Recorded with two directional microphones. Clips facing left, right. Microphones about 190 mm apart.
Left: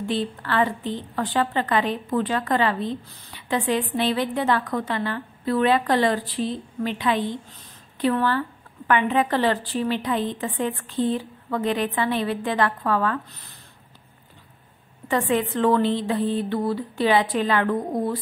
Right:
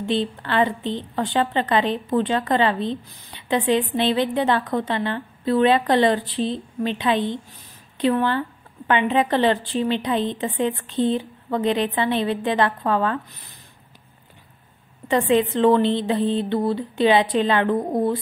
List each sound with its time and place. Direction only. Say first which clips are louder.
0.0 s a woman's voice: right 3 dB; 25° right (ahead or behind)
15.0 s a woman's voice: right 4 dB; 20° right (ahead or behind)